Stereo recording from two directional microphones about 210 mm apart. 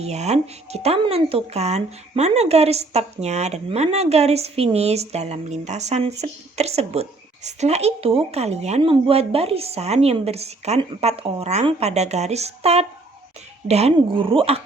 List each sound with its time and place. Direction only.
0.0 s a woman's voice: 30° right (ahead or behind)